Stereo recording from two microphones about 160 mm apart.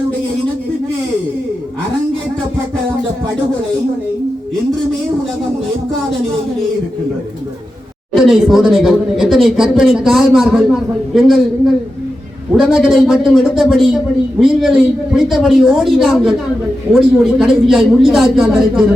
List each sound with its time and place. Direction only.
8.1 s speech: centre (ahead or behind)
17.4 s speech: centre (ahead or behind)